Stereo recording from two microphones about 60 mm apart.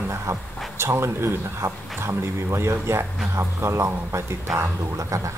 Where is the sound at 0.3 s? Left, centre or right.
Right.